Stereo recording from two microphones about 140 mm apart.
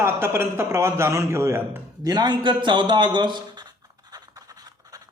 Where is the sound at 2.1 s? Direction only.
30° right (ahead or behind).